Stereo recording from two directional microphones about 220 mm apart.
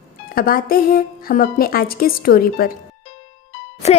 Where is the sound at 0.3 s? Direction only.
40° left (ahead or behind).